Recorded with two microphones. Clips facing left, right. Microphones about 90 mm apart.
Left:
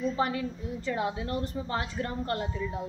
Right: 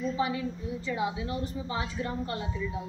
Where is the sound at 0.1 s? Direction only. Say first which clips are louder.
Left 1 dB; 50° left (ahead or behind).